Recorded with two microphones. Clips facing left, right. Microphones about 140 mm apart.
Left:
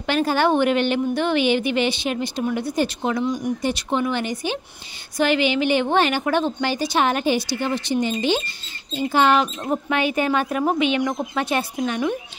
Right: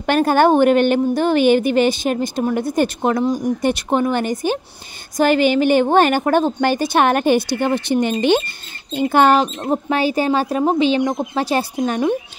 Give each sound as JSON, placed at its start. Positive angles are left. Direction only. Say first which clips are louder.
{"t": 0.0, "sound": "a woman's voice", "louder": "right 5 dB", "side_deg": -50}
{"t": 3.6, "sound": "a woman's voice", "louder": "right 5 dB", "side_deg": -50}
{"t": 9.3, "sound": "speech", "louder": "right 4 dB", "side_deg": -30}